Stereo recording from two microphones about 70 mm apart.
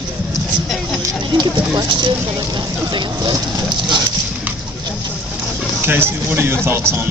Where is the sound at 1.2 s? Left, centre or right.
Right.